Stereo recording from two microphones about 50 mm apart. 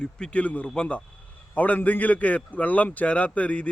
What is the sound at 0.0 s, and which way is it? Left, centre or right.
A man's voice, left.